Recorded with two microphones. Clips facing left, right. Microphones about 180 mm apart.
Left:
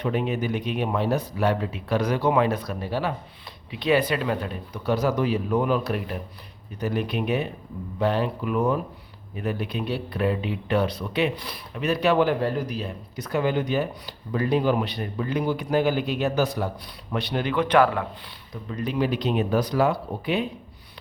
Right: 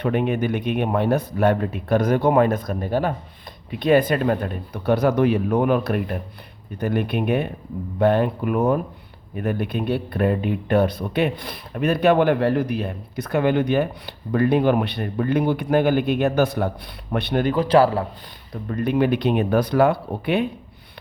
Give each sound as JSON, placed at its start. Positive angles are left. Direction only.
{"t": 0.0, "sound": "speech", "side_deg": -60}
{"t": 18.5, "sound": "speech", "side_deg": -55}